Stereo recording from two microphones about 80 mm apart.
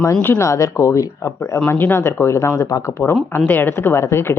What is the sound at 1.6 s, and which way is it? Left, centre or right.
Speech, left.